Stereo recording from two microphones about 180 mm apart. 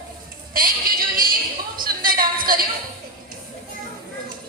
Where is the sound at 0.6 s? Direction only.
50° right (ahead or behind).